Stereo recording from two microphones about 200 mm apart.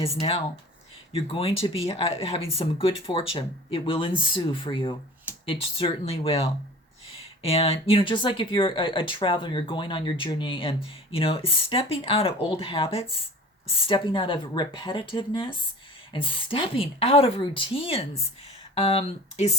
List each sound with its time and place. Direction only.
0.2 s speech: 30° left (ahead or behind)